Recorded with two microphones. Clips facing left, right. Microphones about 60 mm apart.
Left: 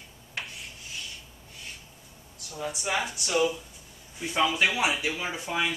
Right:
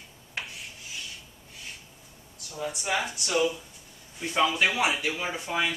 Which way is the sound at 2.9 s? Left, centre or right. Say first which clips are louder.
Even; centre.